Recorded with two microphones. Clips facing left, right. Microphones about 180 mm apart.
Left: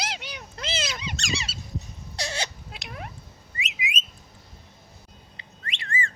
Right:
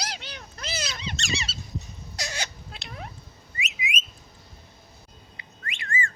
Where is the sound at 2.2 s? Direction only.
30° left (ahead or behind).